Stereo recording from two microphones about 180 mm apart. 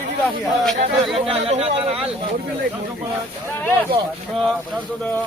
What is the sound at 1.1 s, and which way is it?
Speech, 30° right (ahead or behind).